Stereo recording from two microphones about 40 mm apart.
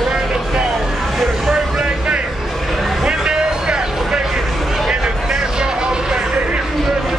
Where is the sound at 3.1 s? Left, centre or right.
Right.